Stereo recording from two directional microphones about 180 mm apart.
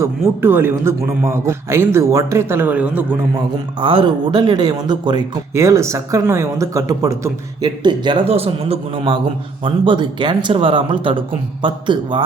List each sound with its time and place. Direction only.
0.0 s speech: 10° right (ahead or behind)
3.3 s speech: 25° right (ahead or behind)